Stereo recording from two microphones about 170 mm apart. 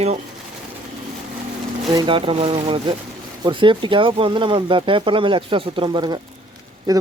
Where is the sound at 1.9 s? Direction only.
30° right (ahead or behind).